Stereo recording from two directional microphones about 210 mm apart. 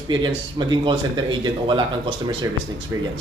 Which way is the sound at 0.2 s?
20° right (ahead or behind).